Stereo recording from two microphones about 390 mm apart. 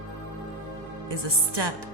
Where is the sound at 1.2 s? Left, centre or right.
Right.